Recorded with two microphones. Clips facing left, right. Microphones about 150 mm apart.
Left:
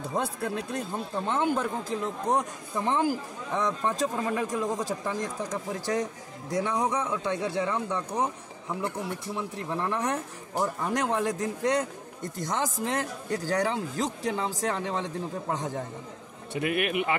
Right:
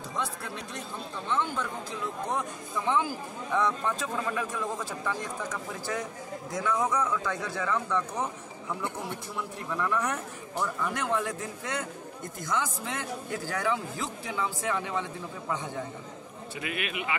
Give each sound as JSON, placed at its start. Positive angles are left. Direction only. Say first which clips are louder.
{"t": 0.1, "sound": "a man's voice", "louder": "left 5 dB", "side_deg": 55}
{"t": 9.7, "sound": "a man's voice", "louder": "even", "side_deg": 30}
{"t": 16.5, "sound": "a man's voice", "louder": "left 8 dB", "side_deg": 50}